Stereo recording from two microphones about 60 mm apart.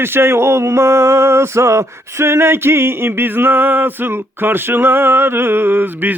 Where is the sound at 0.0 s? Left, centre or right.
Right.